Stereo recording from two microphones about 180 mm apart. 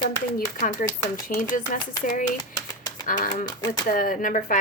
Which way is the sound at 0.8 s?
50° left (ahead or behind).